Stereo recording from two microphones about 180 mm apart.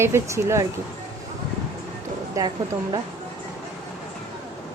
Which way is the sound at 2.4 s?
20° right (ahead or behind).